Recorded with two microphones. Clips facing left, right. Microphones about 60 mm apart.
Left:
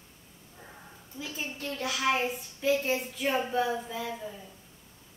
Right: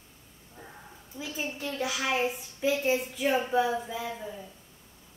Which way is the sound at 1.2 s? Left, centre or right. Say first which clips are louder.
Right 2 dB; centre.